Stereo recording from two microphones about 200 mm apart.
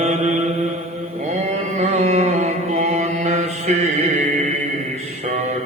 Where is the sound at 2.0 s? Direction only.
35° right (ahead or behind).